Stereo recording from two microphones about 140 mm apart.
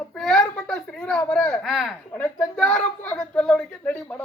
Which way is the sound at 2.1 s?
10° left (ahead or behind).